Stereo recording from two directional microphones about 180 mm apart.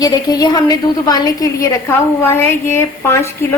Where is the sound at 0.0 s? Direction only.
20° left (ahead or behind).